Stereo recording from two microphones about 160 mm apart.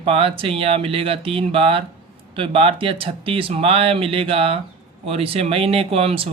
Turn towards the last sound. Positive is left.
turn(degrees=-35)  # may be behind; listen again after turning